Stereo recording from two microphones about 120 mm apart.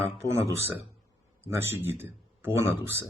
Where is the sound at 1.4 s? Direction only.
20° right (ahead or behind).